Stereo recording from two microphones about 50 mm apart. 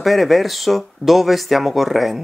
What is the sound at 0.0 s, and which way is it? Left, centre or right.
Speech, centre.